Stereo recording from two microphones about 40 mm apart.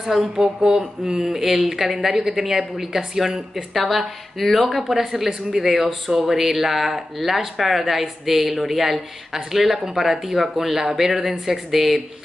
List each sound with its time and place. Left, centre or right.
0.0 s speech: centre
3.7 s speech: centre